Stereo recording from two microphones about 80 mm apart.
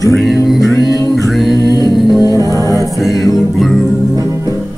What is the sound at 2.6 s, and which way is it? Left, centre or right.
Choir, right.